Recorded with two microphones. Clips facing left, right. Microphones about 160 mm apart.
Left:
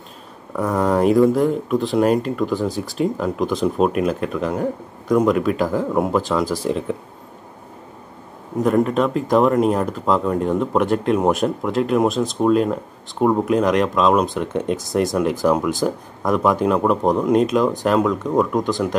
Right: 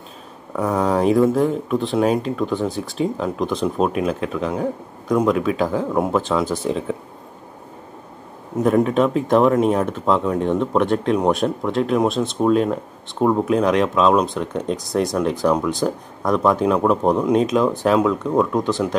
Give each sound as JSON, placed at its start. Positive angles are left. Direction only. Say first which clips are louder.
{"t": 0.6, "sound": "speech", "louder": "left 1 dB", "side_deg": 0}
{"t": 8.5, "sound": "speech", "louder": "right 1 dB", "side_deg": 0}
{"t": 14.4, "sound": "speech", "louder": "left 2 dB", "side_deg": 20}
{"t": 15.4, "sound": "speech", "louder": "even", "side_deg": 5}